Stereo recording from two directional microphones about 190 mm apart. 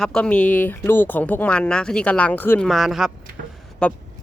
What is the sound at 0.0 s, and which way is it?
Speech, 5° left (ahead or behind).